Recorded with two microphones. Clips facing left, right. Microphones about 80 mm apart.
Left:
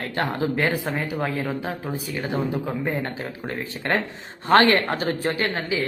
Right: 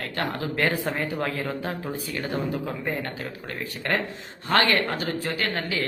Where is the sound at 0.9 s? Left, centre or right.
Centre; by 5.5 s left.